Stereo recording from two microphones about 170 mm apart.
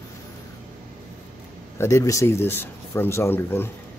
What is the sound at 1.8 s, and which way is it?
Speech, 15° left (ahead or behind).